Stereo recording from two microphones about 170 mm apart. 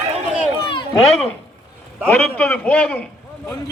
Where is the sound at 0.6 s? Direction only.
30° left (ahead or behind).